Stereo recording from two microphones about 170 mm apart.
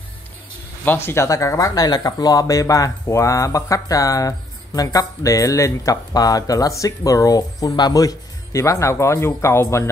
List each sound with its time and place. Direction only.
0.8 s speech: 15° left (ahead or behind)